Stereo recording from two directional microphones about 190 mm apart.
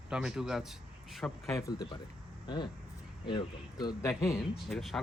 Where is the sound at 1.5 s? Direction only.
20° left (ahead or behind).